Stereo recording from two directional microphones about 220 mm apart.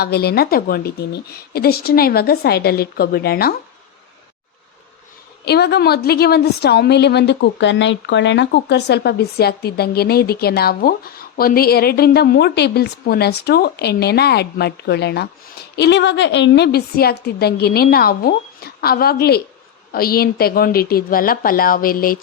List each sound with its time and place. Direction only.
0.0 s a woman's voice: 45° left (ahead or behind)
5.5 s a woman's voice: 50° left (ahead or behind)